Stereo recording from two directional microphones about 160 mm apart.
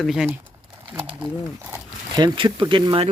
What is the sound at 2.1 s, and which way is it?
Speech, 30° right (ahead or behind).